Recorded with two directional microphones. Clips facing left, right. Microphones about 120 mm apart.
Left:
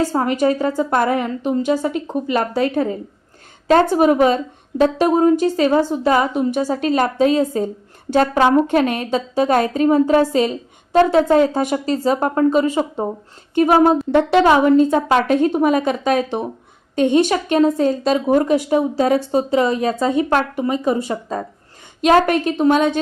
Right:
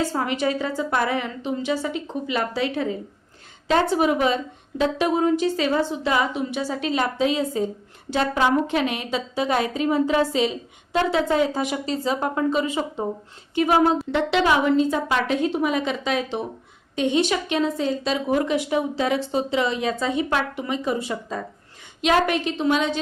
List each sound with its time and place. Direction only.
0.0 s a woman's voice: 40° left (ahead or behind)